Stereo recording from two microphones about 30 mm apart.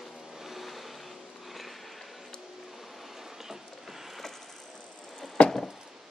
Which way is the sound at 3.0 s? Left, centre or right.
Centre.